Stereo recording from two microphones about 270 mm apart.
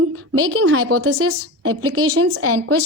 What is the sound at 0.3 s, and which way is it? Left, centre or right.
A woman's voice, right.